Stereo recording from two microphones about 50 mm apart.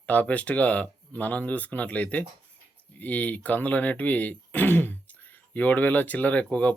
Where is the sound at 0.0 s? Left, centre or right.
Left.